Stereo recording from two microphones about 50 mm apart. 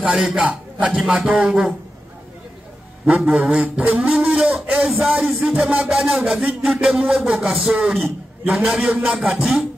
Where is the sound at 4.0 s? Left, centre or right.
Centre.